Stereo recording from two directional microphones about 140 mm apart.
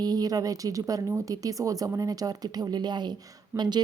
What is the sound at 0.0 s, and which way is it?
Speech, 30° right (ahead or behind).